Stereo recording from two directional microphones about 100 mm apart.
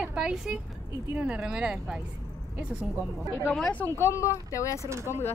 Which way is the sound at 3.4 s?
5° left (ahead or behind).